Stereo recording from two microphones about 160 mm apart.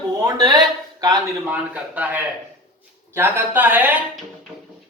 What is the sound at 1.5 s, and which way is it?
Speech, 10° right (ahead or behind).